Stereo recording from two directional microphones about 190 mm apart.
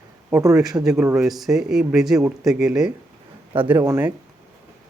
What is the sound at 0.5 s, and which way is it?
A man's voice, 5° right (ahead or behind).